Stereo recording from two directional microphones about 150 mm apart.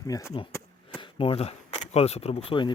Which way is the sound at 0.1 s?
20° left (ahead or behind).